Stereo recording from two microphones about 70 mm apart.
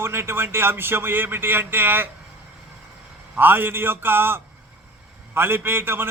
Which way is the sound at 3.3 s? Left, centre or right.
Right.